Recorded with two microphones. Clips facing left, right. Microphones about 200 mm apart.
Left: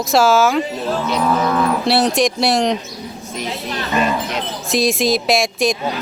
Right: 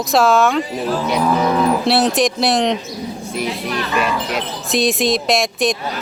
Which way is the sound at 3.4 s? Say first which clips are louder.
Right 2 dB; 35° left (ahead or behind).